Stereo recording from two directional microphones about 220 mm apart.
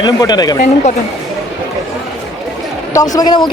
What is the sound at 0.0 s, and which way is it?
Speech, 20° left (ahead or behind).